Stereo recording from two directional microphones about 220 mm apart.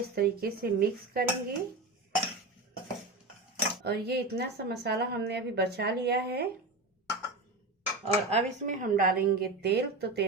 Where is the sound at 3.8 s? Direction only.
45° right (ahead or behind).